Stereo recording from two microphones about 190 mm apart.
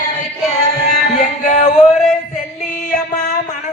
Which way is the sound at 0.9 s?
40° left (ahead or behind).